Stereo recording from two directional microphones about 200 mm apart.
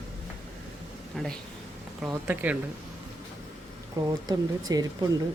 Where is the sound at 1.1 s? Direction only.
5° left (ahead or behind).